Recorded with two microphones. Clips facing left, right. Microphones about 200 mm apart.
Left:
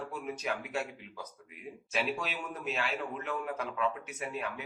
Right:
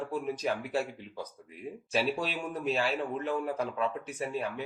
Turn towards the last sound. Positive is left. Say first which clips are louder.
# right 4 dB
turn(degrees=-30)  # may be behind; listen again after turning